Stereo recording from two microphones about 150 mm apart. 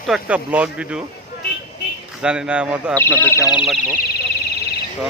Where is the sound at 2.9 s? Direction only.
15° left (ahead or behind).